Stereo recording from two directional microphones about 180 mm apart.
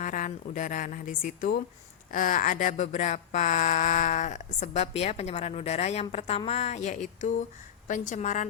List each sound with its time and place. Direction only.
0.0 s a woman's voice: 45° left (ahead or behind)